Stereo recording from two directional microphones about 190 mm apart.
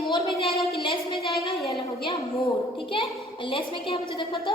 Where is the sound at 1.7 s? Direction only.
25° left (ahead or behind).